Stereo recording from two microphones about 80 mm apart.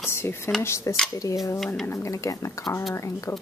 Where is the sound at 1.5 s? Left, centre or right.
Centre.